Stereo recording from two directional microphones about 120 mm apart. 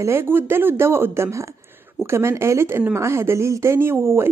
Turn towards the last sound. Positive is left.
turn(degrees=-20)  # may be behind; listen again after turning